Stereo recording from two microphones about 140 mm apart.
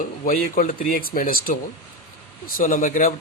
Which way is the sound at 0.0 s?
70° left (ahead or behind).